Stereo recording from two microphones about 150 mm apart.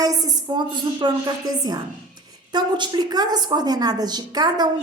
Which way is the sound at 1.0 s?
30° right (ahead or behind).